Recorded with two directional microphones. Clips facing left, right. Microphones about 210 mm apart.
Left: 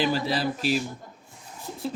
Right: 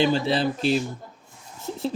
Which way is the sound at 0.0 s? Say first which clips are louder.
Right 4 dB; 25° right (ahead or behind).